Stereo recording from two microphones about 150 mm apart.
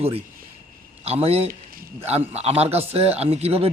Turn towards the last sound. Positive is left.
turn(degrees=-45)  # may be behind; listen again after turning